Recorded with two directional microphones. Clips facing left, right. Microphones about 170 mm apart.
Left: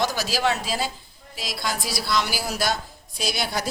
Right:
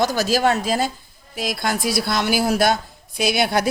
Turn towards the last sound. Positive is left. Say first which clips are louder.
# right 8 dB
turn(degrees=-60)  # may be behind; listen again after turning